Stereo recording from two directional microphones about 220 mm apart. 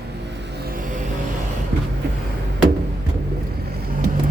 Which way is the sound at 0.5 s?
45° right (ahead or behind).